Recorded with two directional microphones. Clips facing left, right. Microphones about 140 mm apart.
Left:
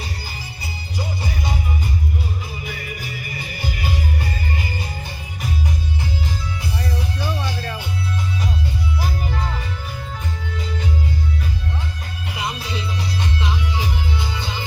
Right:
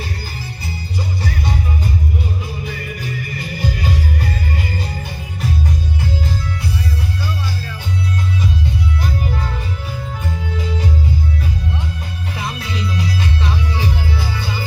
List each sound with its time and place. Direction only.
0.6 s music: 10° left (ahead or behind)
12.3 s music: 15° left (ahead or behind)
12.5 s music: 30° left (ahead or behind)
13.4 s music: 15° left (ahead or behind)